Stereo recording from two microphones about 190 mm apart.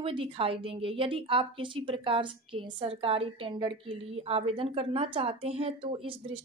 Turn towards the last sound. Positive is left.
turn(degrees=-30)  # may be behind; listen again after turning